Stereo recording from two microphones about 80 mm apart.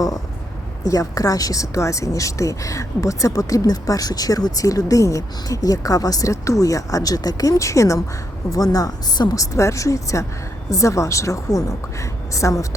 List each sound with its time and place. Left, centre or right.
0.9 s a woman's voice: left